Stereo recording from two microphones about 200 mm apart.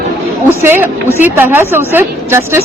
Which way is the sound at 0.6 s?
10° right (ahead or behind).